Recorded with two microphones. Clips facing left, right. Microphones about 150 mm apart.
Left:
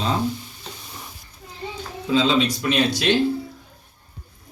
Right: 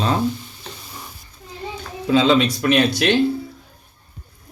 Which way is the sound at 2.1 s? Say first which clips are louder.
Right 4 dB; 65° right (ahead or behind).